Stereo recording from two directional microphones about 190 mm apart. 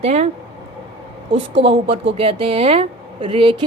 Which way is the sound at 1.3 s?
30° right (ahead or behind).